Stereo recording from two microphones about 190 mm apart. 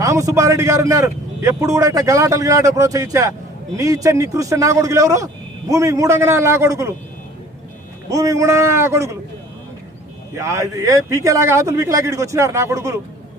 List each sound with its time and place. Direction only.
0.0 s a man's voice: 15° right (ahead or behind)
8.1 s a man's voice: 15° right (ahead or behind)
10.3 s a man's voice: 15° right (ahead or behind)